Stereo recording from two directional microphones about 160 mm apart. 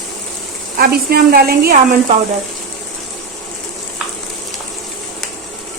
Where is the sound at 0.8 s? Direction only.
70° right (ahead or behind).